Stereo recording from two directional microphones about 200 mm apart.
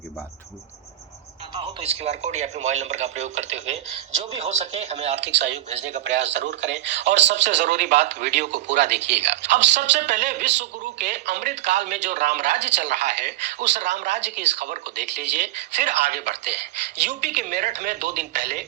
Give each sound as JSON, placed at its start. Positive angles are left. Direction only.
{"t": 1.8, "sound": "a woman's voice", "side_deg": -30}
{"t": 5.2, "sound": "speech", "side_deg": -60}
{"t": 5.6, "sound": "a woman's voice", "side_deg": -30}
{"t": 6.1, "sound": "speech", "side_deg": -60}
{"t": 7.6, "sound": "a woman's voice", "side_deg": -40}
{"t": 8.4, "sound": "speech", "side_deg": -60}
{"t": 8.7, "sound": "a woman's voice", "side_deg": -35}
{"t": 15.4, "sound": "a woman's voice", "side_deg": -35}